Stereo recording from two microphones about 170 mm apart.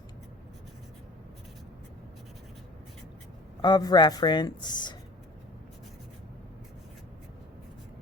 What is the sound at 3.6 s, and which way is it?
Speech, 25° left (ahead or behind).